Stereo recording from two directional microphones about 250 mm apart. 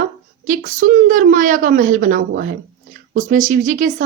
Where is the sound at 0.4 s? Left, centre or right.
Right.